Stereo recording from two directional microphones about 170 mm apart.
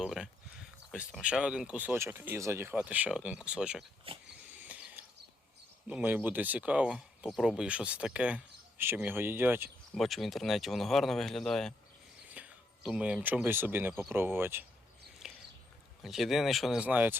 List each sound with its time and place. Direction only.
0.0 s speech: 5° right (ahead or behind)
4.1 s wheeze: 35° right (ahead or behind)
4.4 s a sound: 10° right (ahead or behind)
5.9 s speech: 10° right (ahead or behind)
9.9 s speech: centre (ahead or behind)
15.2 s a sound: 5° right (ahead or behind)
16.0 s speech: centre (ahead or behind)